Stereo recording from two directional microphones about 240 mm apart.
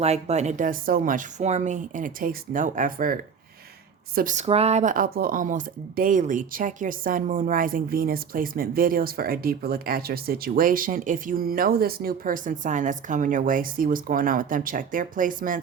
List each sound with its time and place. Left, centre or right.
0.0 s speech: right